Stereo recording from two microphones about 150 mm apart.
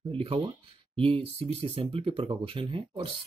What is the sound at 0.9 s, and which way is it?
Speech, 40° right (ahead or behind).